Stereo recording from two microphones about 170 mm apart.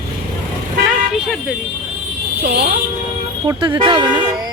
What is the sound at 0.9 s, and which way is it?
Vehicle, 5° right (ahead or behind).